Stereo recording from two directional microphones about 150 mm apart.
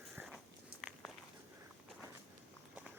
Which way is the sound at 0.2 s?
15° right (ahead or behind).